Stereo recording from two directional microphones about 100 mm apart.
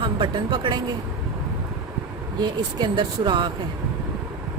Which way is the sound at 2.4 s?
45° right (ahead or behind).